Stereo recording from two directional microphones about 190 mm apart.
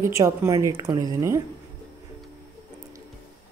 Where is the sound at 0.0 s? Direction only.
15° right (ahead or behind).